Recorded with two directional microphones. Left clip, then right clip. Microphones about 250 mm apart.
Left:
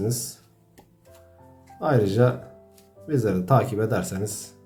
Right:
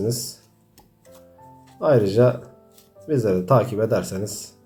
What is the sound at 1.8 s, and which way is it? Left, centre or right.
Speech, left.